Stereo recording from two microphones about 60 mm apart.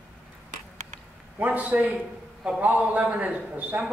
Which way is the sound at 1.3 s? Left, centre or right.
Right.